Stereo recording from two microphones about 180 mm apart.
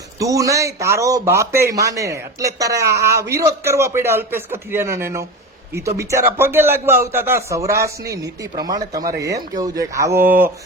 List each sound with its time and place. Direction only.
0.2 s a man's voice: 20° right (ahead or behind)